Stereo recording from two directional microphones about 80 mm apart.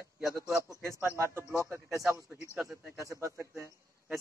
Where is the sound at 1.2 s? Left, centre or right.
Right.